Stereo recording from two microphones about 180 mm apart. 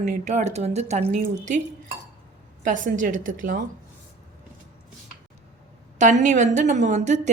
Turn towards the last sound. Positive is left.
turn(degrees=-40)  # may be behind; listen again after turning